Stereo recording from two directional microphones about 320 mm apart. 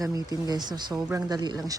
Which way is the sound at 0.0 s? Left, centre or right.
Centre.